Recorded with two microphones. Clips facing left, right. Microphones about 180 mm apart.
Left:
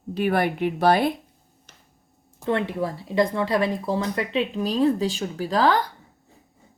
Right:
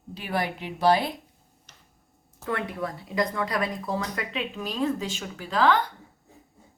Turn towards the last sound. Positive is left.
turn(degrees=35)  # may be behind; listen again after turning